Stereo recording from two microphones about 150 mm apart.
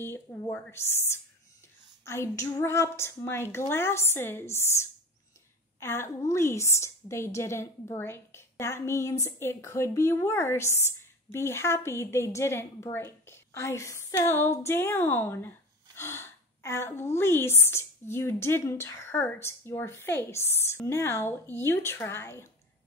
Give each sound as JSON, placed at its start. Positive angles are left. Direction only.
{"t": 0.0, "sound": "a woman's voice", "side_deg": 20}